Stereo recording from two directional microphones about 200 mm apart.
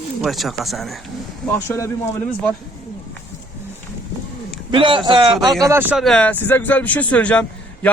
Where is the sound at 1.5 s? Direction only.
10° left (ahead or behind).